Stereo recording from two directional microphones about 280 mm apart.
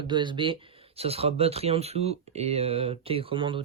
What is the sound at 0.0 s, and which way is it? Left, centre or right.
Speech, centre.